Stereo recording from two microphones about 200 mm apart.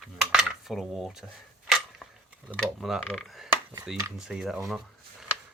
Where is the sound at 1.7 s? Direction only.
Centre (ahead or behind).